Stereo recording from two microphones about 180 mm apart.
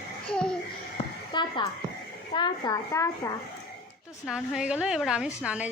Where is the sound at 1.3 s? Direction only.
25° left (ahead or behind).